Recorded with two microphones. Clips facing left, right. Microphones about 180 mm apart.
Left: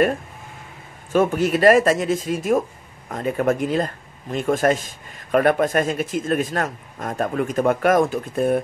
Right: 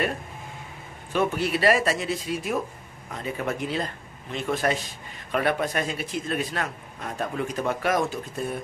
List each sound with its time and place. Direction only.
1.1 s speech: 45° left (ahead or behind)